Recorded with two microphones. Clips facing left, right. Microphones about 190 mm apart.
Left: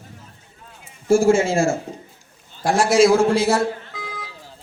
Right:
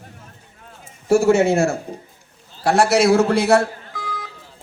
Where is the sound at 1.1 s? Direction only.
65° right (ahead or behind).